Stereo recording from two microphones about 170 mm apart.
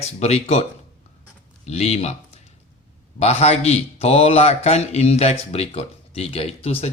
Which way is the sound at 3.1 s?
40° left (ahead or behind).